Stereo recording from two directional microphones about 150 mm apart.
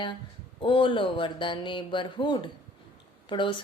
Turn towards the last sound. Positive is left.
turn(degrees=35)  # may be behind; listen again after turning